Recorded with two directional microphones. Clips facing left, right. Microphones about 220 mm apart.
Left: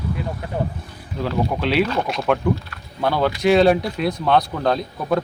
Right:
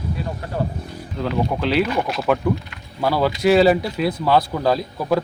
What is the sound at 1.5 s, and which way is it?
Speech, centre (ahead or behind).